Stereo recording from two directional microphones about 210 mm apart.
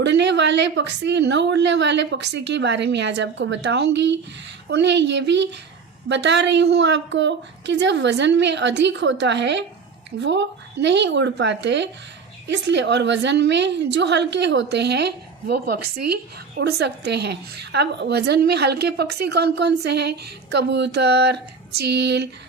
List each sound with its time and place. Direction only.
0.0 s a woman's voice: 55° right (ahead or behind)